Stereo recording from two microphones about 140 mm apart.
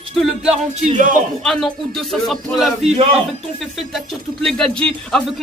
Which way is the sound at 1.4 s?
5° left (ahead or behind).